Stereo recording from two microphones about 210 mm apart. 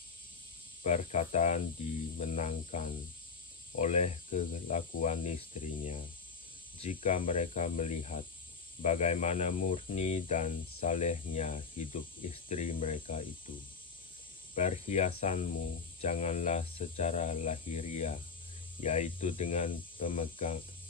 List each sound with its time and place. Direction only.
0.8 s speech: 35° left (ahead or behind)
6.8 s speech: 35° left (ahead or behind)
14.5 s speech: 35° left (ahead or behind)